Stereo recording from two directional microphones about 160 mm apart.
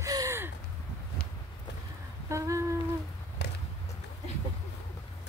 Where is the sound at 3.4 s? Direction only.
90° left.